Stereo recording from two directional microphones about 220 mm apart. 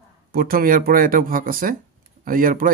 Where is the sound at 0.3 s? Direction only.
40° right (ahead or behind).